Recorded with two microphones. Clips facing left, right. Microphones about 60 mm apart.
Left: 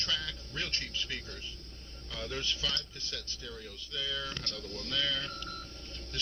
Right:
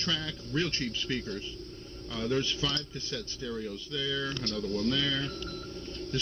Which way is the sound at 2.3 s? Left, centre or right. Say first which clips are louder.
Right 6 dB; centre.